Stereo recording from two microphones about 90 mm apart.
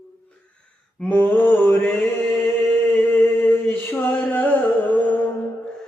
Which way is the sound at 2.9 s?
20° left (ahead or behind).